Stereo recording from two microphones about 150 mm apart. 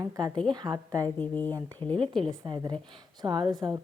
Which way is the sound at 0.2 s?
30° right (ahead or behind).